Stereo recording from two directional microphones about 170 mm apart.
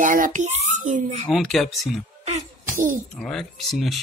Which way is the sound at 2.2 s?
45° right (ahead or behind).